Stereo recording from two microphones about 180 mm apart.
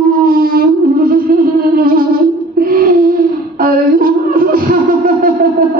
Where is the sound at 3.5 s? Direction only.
55° right (ahead or behind).